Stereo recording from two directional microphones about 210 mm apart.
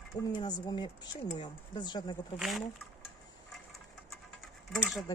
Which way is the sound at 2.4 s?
Centre (ahead or behind).